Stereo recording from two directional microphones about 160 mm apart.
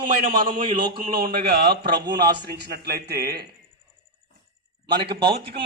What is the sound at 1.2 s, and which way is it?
Speech, 70° right (ahead or behind).